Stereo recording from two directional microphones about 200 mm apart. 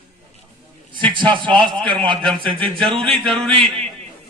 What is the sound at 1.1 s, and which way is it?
A man's voice, 25° right (ahead or behind).